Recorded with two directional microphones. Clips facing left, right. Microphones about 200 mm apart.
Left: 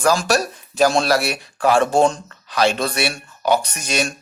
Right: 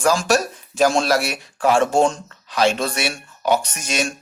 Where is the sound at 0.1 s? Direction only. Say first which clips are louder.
Even; 35° left (ahead or behind).